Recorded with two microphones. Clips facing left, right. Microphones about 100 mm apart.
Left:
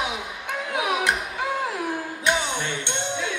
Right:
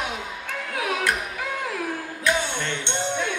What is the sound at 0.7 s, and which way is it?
Music, 20° left (ahead or behind).